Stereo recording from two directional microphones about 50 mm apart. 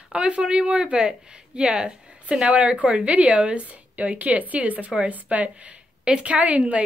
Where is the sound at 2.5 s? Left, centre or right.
Right.